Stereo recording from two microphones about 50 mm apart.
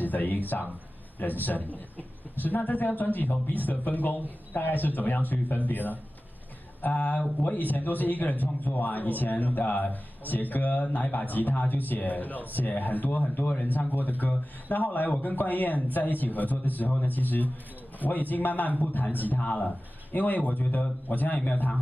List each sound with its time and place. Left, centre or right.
0.0 s a man's voice: left